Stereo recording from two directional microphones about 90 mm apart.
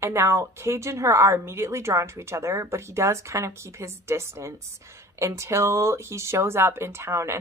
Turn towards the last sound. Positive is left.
turn(degrees=-30)  # may be behind; listen again after turning